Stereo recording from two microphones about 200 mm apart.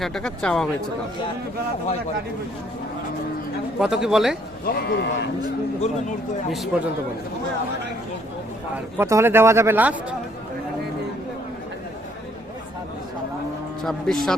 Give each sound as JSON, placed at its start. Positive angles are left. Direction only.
{"t": 0.0, "sound": "speech", "side_deg": 5}
{"t": 3.8, "sound": "speech", "side_deg": -5}
{"t": 4.6, "sound": "speech", "side_deg": 50}
{"t": 6.5, "sound": "speech", "side_deg": 0}
{"t": 8.7, "sound": "a man's voice", "side_deg": -10}
{"t": 13.8, "sound": "speech", "side_deg": 0}